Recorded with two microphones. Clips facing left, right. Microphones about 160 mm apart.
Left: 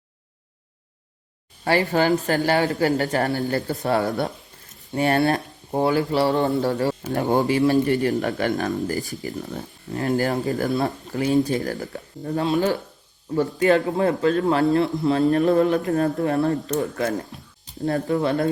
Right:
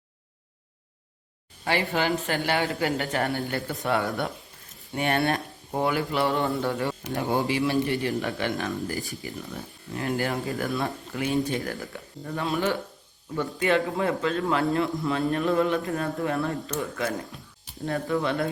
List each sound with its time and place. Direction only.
1.9 s speech: 40° left (ahead or behind)
17.8 s speech: 40° left (ahead or behind)